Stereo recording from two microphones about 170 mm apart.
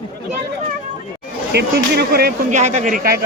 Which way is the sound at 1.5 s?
70° right (ahead or behind).